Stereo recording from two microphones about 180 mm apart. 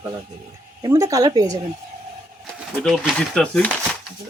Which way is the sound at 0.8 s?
20° right (ahead or behind).